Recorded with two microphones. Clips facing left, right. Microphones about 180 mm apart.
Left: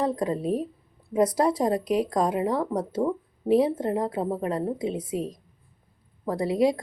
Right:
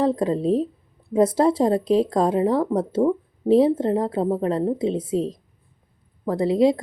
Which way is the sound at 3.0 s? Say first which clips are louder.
Right 6 dB; 5° right (ahead or behind).